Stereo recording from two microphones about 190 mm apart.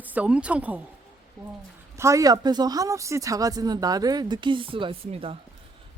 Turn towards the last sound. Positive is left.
turn(degrees=-30)  # may be behind; listen again after turning